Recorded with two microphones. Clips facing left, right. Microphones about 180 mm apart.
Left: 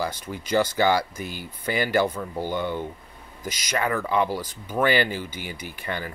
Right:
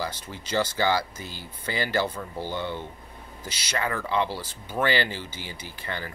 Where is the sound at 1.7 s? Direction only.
15° left (ahead or behind).